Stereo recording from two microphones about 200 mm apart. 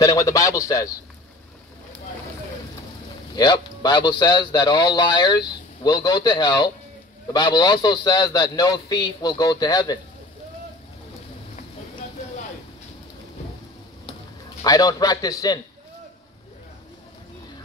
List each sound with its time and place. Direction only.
0.0 s a man's voice: 15° left (ahead or behind)
3.3 s a man's voice: 20° left (ahead or behind)
14.6 s a man's voice: 20° left (ahead or behind)